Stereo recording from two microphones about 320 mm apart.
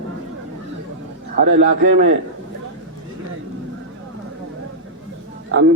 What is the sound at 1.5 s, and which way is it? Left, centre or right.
Speech, right.